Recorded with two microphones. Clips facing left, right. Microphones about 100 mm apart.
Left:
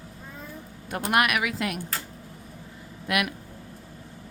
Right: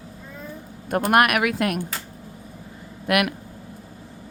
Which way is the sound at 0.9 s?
50° right (ahead or behind).